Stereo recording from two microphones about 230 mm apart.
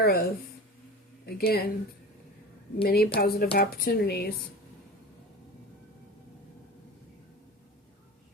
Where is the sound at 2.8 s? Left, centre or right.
Left.